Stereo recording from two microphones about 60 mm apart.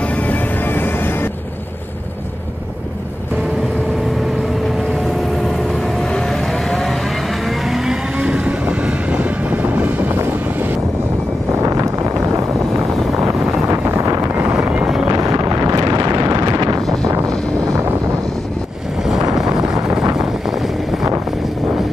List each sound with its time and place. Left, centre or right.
0.0 s music: left
5.7 s vehicle: centre; by 10.0 s right
11.6 s vehicle: right
13.7 s wind noise: right
15.0 s wind noise: right
19.3 s vehicle: centre